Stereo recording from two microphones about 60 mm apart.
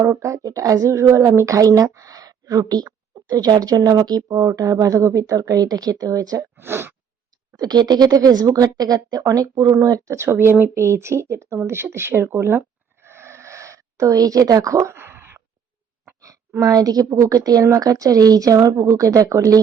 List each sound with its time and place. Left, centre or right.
0.2 s a woman's voice: right
6.6 s speech: right
7.6 s speech: right
9.7 s speech: right
10.4 s speech: right
13.0 s a sound: right
14.9 s a sound: right
16.6 s a woman's voice: right